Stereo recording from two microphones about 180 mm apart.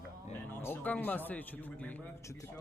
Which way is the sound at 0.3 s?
10° left (ahead or behind).